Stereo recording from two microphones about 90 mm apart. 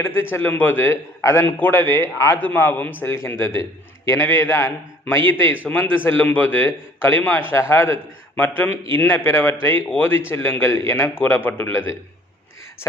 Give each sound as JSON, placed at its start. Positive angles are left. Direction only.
{"t": 0.0, "sound": "a man's voice", "side_deg": 25}